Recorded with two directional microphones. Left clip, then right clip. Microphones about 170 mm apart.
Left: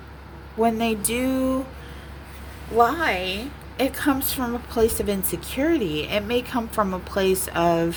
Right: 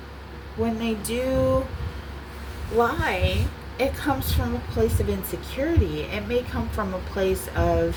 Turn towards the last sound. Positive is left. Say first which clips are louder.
# left 3 dB
turn(degrees=60)  # may be behind; listen again after turning